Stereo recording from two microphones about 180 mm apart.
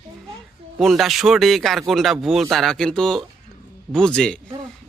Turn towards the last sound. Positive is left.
turn(degrees=5)  # may be behind; listen again after turning